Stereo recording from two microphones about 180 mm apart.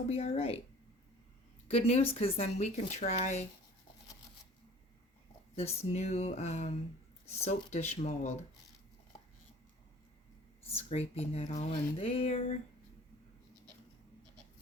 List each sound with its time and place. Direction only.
0.1 s speech: 35° left (ahead or behind)
1.6 s speech: 35° left (ahead or behind)
5.9 s speech: 35° left (ahead or behind)
9.1 s a sound: 35° left (ahead or behind)
10.7 s speech: 35° left (ahead or behind)